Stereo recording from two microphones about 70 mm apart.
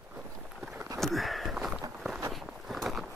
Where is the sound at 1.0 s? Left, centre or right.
Centre.